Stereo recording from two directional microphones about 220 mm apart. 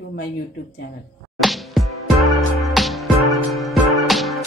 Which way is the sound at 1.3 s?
Centre (ahead or behind).